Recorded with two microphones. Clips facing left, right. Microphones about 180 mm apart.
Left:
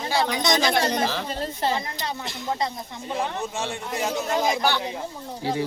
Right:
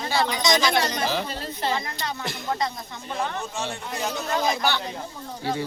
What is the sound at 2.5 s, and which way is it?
Speech, 20° left (ahead or behind).